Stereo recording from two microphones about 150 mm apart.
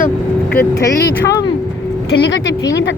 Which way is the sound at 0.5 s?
15° left (ahead or behind).